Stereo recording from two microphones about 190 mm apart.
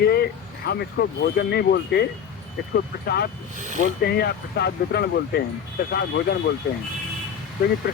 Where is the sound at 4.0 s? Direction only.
60° left (ahead or behind).